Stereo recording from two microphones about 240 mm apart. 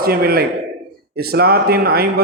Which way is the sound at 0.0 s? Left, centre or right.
Right.